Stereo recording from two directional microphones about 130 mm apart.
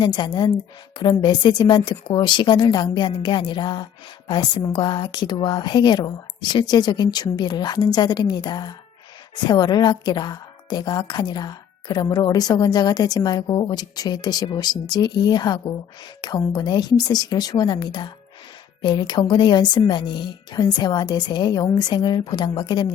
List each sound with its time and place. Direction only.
0.0 s a woman's voice: 35° left (ahead or behind)